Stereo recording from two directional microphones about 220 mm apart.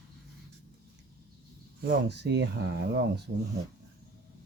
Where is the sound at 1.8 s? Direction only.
45° right (ahead or behind).